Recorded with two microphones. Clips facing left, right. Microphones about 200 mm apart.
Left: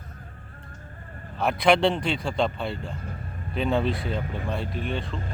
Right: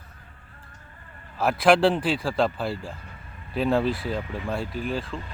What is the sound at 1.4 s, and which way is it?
Speech, centre (ahead or behind).